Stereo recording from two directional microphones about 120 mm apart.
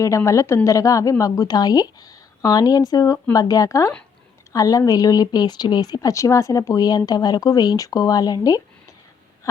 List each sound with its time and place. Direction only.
0.0 s a woman's voice: 25° left (ahead or behind)